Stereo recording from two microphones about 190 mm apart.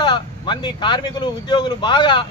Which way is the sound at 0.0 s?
25° left (ahead or behind).